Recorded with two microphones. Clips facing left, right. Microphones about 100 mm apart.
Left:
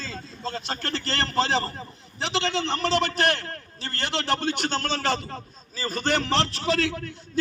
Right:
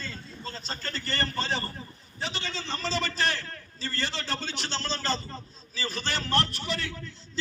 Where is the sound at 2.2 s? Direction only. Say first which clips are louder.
Left 9 dB; 80° left.